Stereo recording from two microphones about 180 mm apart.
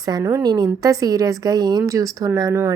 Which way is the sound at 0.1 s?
20° right (ahead or behind).